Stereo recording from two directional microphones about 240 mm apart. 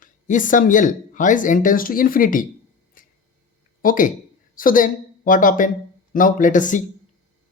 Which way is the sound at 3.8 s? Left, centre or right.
Left.